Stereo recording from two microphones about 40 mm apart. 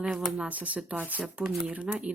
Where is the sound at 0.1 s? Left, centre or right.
Centre.